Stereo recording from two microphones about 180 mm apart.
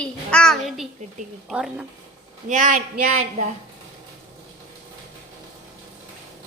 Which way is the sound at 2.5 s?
45° right (ahead or behind).